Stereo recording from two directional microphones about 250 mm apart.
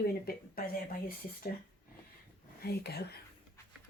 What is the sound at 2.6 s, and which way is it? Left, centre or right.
Speech, left.